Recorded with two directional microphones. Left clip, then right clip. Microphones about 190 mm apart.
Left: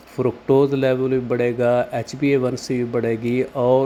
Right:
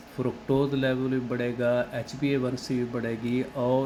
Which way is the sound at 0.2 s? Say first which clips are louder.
Left 10 dB; 40° left (ahead or behind).